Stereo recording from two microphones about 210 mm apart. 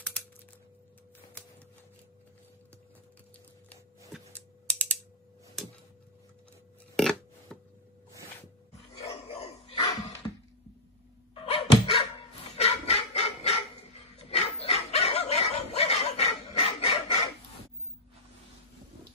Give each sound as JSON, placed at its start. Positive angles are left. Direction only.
{"t": 4.6, "sound": "typing", "side_deg": 5}
{"t": 7.0, "sound": "a sound", "side_deg": 5}
{"t": 9.0, "sound": "dog", "side_deg": 30}
{"t": 11.3, "sound": "dog", "side_deg": 25}